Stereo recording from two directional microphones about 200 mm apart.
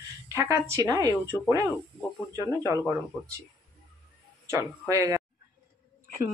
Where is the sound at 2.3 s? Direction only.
20° right (ahead or behind).